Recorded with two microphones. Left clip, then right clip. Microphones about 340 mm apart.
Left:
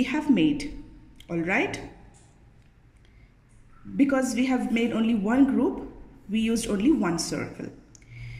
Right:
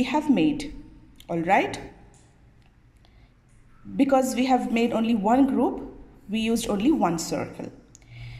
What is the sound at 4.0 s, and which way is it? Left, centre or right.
A woman's voice, centre.